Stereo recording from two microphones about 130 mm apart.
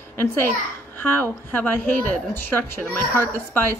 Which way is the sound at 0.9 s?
15° left (ahead or behind).